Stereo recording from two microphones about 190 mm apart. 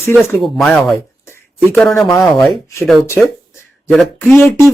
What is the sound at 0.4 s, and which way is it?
Speech, centre (ahead or behind).